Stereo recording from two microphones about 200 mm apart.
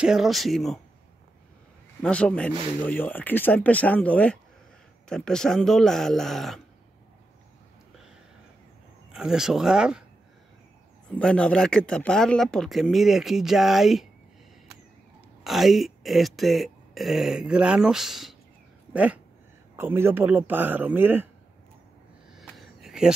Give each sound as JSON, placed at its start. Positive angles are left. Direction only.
{"t": 0.0, "sound": "speech", "side_deg": 0}
{"t": 2.0, "sound": "speech", "side_deg": 5}
{"t": 9.1, "sound": "speech", "side_deg": 0}
{"t": 11.1, "sound": "speech", "side_deg": 5}
{"t": 15.4, "sound": "speech", "side_deg": 0}
{"t": 19.8, "sound": "a man's voice", "side_deg": -10}
{"t": 22.4, "sound": "a sound", "side_deg": 0}